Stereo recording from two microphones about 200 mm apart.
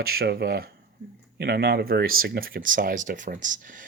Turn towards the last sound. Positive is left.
turn(degrees=-40)  # may be behind; listen again after turning